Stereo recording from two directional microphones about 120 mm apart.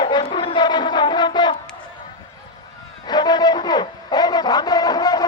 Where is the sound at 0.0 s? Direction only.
40° left (ahead or behind).